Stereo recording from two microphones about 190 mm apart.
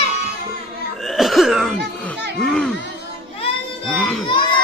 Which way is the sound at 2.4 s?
5° left (ahead or behind).